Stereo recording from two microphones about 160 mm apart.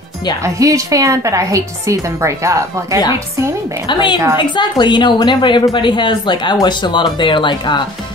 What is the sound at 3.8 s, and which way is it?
A woman's voice, 30° left (ahead or behind).